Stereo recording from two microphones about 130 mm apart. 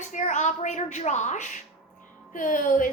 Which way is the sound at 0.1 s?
70° left (ahead or behind).